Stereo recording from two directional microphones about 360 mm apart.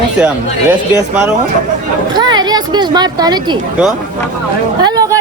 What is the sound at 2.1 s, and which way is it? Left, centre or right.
A woman's voice, centre.